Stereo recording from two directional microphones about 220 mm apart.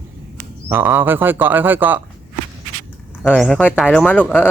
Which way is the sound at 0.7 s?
10° right (ahead or behind).